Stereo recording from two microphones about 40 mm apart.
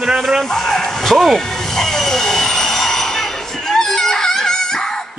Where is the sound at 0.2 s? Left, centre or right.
Centre.